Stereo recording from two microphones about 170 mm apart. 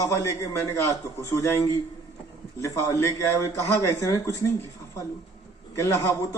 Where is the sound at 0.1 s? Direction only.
15° left (ahead or behind).